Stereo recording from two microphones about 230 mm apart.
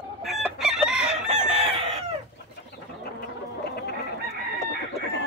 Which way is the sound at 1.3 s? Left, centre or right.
Right.